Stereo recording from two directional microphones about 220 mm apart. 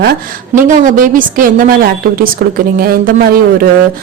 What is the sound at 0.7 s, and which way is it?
A woman's voice, 35° right (ahead or behind).